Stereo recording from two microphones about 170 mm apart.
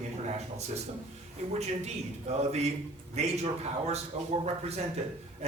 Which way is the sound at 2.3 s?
40° right (ahead or behind).